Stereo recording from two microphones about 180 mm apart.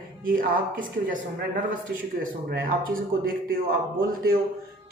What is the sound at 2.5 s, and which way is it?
Speech, 50° right (ahead or behind).